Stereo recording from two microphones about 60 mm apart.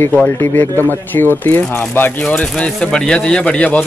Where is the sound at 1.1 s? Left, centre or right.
Left.